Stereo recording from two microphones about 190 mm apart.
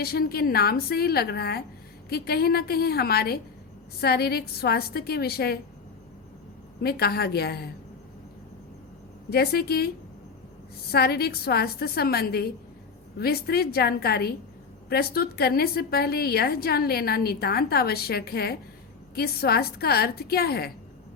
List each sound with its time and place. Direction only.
0.0 s a woman's voice: 55° left (ahead or behind)
6.8 s a woman's voice: 55° left (ahead or behind)
9.3 s a woman's voice: 55° left (ahead or behind)
10.9 s a woman's voice: 55° left (ahead or behind)